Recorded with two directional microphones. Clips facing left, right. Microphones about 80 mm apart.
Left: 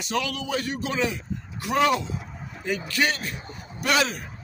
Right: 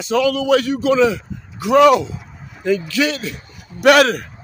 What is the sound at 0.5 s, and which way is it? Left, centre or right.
A man's voice, right.